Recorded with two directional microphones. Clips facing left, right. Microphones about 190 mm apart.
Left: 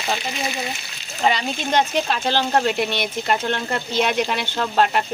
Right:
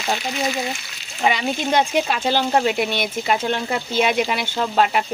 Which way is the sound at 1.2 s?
10° right (ahead or behind).